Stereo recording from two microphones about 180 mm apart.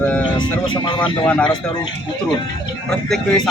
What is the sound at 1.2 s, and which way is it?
Speech, 5° left (ahead or behind).